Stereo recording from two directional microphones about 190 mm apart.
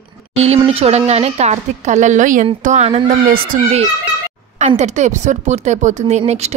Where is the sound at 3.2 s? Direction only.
45° right (ahead or behind).